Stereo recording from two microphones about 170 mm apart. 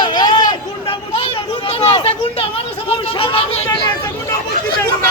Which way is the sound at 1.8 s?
35° left (ahead or behind).